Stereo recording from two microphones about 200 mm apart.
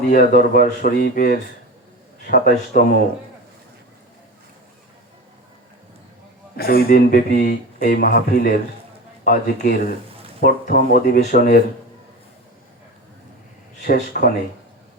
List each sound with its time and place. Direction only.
0.0 s speech: 45° left (ahead or behind)
6.6 s speech: 50° left (ahead or behind)
13.8 s speech: 45° left (ahead or behind)